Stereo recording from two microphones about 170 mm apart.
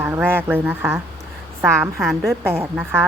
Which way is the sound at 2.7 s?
15° right (ahead or behind).